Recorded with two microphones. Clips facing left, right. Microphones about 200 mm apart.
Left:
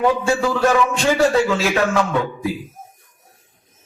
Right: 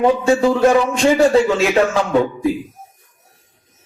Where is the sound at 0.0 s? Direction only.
25° right (ahead or behind).